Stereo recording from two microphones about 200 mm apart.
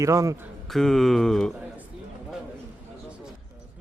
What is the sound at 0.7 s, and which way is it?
Speech, centre (ahead or behind).